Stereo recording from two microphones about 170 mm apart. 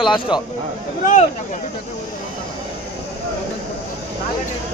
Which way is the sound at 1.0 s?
50° left (ahead or behind).